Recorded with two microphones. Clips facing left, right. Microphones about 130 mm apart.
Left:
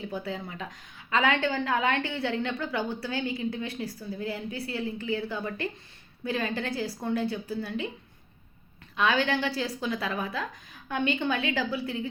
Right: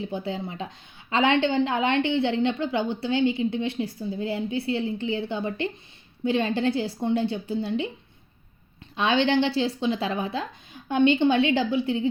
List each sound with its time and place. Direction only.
0.1 s a woman's voice: 25° right (ahead or behind)
9.0 s a woman's voice: 30° right (ahead or behind)